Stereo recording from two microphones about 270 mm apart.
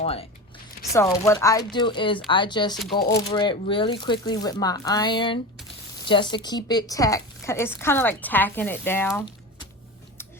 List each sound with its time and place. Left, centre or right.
0.0 s a sound: left
0.9 s speech: centre
2.9 s speech: left
3.2 s speech: centre